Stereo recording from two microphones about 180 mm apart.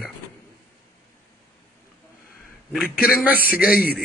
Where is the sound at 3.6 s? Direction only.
55° left (ahead or behind).